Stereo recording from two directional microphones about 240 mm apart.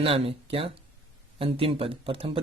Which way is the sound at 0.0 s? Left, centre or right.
Right.